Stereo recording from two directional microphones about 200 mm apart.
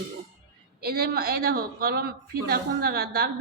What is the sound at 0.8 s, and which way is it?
A woman's voice, 50° right (ahead or behind).